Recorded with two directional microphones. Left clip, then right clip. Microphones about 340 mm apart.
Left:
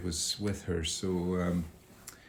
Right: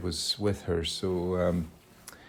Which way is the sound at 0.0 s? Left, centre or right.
Centre.